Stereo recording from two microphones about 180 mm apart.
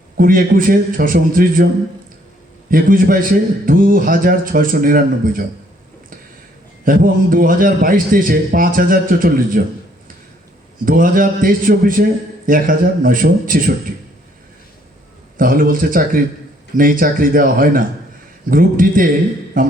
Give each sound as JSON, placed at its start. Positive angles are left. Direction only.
{"t": 0.2, "sound": "a man's voice", "side_deg": -50}
{"t": 6.8, "sound": "a man's voice", "side_deg": -50}
{"t": 10.8, "sound": "a man's voice", "side_deg": -50}
{"t": 15.4, "sound": "a man's voice", "side_deg": -50}